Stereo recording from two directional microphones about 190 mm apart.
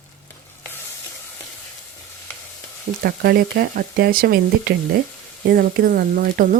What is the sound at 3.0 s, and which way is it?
Speech, 55° right (ahead or behind).